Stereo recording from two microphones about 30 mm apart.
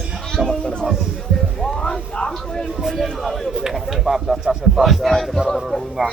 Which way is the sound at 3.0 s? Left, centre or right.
Centre.